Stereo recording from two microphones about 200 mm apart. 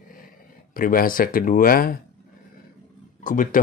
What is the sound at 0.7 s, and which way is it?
Speech, 45° left (ahead or behind).